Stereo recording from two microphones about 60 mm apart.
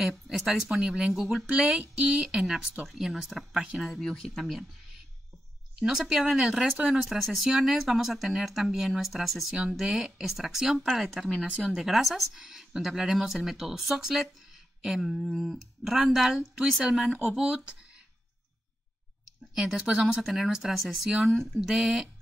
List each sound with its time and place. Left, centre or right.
0.3 s speech: centre
1.4 s speech: right
2.3 s speech: centre
4.0 s speech: centre
5.8 s speech: centre
11.3 s speech: centre
11.6 s speech: centre
19.5 s speech: centre